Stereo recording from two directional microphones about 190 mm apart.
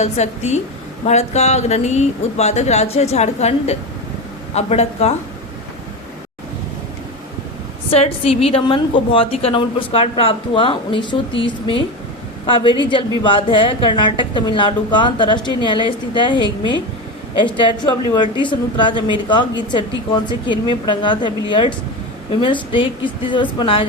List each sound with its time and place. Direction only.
0.0 s speech: 35° left (ahead or behind)
7.9 s a woman's voice: 30° left (ahead or behind)